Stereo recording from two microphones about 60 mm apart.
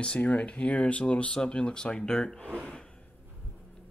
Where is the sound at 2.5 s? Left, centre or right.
Centre.